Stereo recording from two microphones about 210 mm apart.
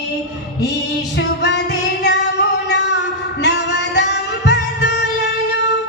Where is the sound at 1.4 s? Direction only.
55° left (ahead or behind).